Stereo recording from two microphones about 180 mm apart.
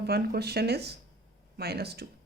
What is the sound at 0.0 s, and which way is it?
Speech, 60° right (ahead or behind).